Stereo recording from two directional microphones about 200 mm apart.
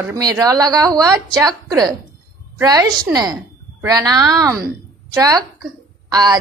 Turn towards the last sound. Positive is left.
turn(degrees=-20)  # may be behind; listen again after turning